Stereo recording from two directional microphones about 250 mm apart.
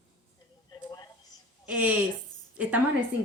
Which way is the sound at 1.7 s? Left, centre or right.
Centre.